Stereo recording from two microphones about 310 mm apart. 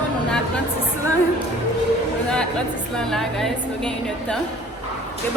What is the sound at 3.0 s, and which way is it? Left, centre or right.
A woman's voice, centre.